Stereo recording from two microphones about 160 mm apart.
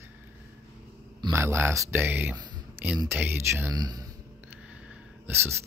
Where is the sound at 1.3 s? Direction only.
15° right (ahead or behind).